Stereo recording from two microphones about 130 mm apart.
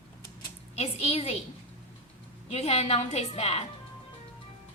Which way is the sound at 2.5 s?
55° left (ahead or behind).